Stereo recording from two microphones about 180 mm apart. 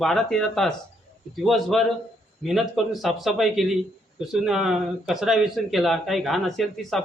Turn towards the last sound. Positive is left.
turn(degrees=0)  # may be behind; listen again after turning